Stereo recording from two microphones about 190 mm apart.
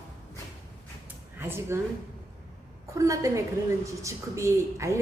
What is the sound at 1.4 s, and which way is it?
Speech, 10° right (ahead or behind).